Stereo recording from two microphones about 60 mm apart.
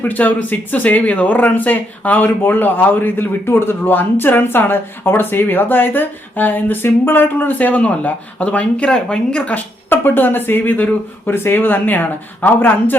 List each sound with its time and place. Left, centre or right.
0.0 s speech: left